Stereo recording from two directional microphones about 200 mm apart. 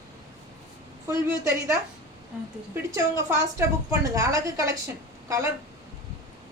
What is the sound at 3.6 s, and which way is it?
A woman's voice, 15° right (ahead or behind).